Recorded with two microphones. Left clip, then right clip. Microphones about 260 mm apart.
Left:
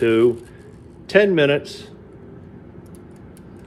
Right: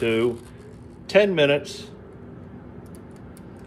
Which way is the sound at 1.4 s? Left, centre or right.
Centre.